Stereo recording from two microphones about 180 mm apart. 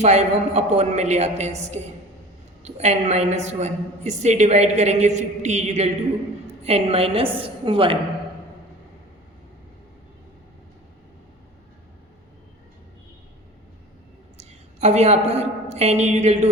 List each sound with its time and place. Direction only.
0.0 s a woman's voice: 40° right (ahead or behind)
14.3 s a woman's voice: 35° right (ahead or behind)